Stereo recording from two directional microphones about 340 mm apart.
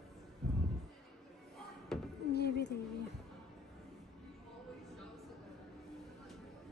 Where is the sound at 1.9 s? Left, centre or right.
Centre.